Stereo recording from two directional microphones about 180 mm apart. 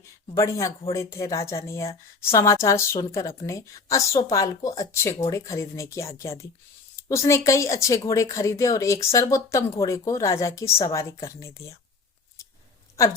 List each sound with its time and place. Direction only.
0.3 s a woman's voice: 20° left (ahead or behind)